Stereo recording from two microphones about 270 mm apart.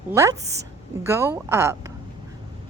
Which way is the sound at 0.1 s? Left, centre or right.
Centre.